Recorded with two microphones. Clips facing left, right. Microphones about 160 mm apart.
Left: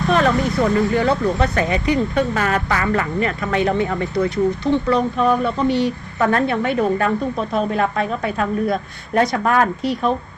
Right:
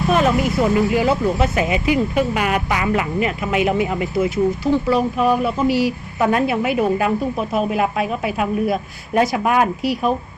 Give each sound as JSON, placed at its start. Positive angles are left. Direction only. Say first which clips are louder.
{"t": 0.2, "sound": "a woman's voice", "louder": "even", "side_deg": -20}
{"t": 0.9, "sound": "a woman's voice", "louder": "even", "side_deg": -5}